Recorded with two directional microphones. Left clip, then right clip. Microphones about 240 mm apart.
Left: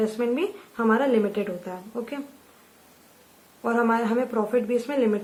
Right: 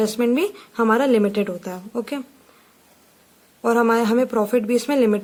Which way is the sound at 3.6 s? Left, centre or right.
Right.